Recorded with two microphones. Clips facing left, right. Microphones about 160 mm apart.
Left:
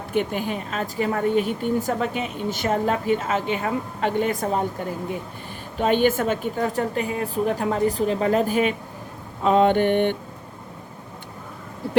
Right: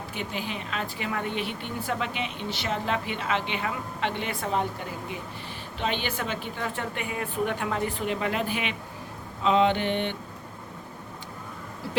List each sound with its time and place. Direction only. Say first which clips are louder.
0.1 s speech: left 11 dB; 55° left (ahead or behind)
5.7 s a woman's voice: left 11 dB; 45° left (ahead or behind)